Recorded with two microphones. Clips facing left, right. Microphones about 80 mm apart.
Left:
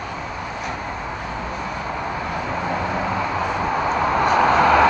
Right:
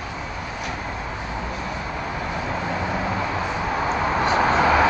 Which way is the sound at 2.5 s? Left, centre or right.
Centre.